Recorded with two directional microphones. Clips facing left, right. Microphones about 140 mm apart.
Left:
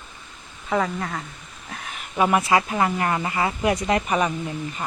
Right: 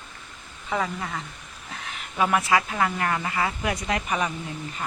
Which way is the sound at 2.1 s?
25° left (ahead or behind).